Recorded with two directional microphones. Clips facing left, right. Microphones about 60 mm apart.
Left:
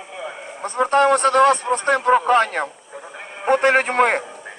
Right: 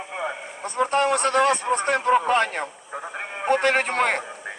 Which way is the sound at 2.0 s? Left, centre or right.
Left.